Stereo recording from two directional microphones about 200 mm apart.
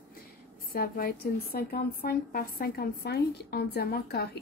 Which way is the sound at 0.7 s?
50° left (ahead or behind).